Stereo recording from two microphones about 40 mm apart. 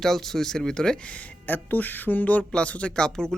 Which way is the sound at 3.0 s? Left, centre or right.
Centre.